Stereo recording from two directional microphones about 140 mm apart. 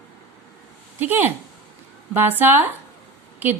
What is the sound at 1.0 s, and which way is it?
Speech, 15° right (ahead or behind).